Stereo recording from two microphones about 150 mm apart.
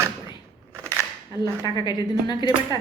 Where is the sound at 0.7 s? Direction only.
20° right (ahead or behind).